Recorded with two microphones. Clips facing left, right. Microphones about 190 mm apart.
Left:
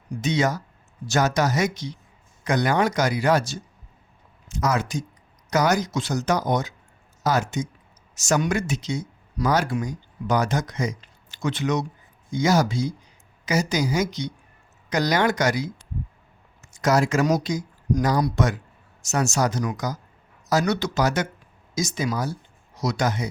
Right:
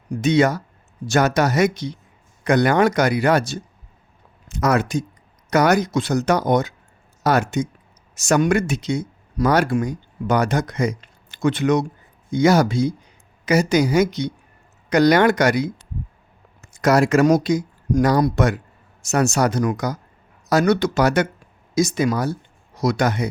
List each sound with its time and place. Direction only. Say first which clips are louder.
0.2 s speech: right 6 dB; 60° right (ahead or behind)